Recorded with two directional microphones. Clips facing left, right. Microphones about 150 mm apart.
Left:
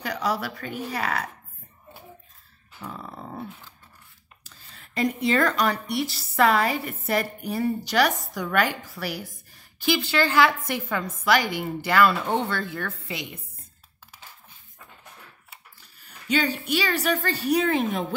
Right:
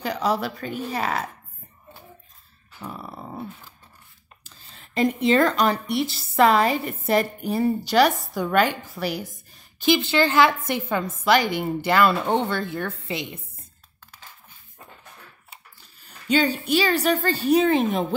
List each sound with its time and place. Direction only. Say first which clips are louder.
0.0 s a woman's voice: right 3 dB; 25° right (ahead or behind)
2.8 s a sound: right 1 dB; 10° right (ahead or behind)
4.6 s a woman's voice: right 3 dB; 25° right (ahead or behind)
16.3 s a woman's voice: right 4 dB; 30° right (ahead or behind)